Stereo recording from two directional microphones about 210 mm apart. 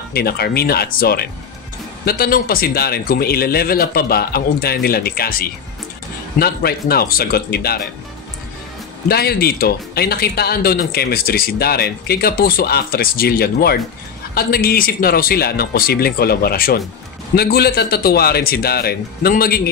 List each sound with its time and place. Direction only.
0.1 s speech: 50° left (ahead or behind)
9.1 s speech: 45° left (ahead or behind)